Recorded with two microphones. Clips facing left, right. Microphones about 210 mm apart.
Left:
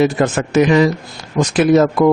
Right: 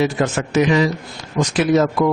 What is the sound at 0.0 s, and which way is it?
Speech, 50° left (ahead or behind).